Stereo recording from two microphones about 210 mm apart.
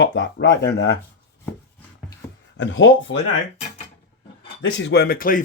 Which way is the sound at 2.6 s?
60° left (ahead or behind).